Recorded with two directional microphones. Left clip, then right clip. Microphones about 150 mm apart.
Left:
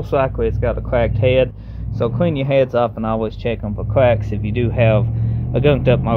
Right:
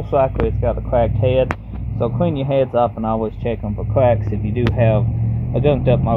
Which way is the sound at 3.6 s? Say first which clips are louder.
Left 1 dB; 75° left (ahead or behind).